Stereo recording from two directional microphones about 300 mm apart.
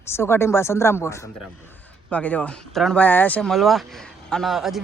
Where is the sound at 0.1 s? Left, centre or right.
Centre.